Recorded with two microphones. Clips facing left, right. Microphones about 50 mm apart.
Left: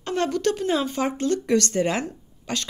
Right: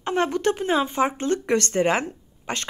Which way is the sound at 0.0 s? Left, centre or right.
Right.